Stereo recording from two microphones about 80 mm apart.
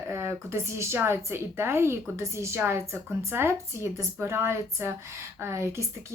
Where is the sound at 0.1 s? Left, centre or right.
Right.